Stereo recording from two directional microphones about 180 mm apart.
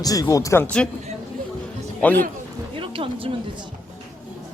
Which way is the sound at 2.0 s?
10° left (ahead or behind).